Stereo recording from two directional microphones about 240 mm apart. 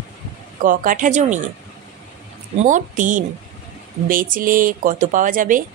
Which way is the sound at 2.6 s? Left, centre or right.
Right.